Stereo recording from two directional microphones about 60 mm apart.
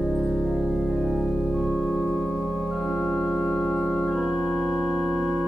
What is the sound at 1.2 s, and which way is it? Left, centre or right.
Organ, centre.